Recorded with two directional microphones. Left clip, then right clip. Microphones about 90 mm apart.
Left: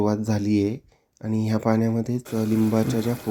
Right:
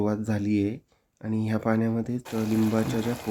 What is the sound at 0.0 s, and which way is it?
Speech, 20° left (ahead or behind).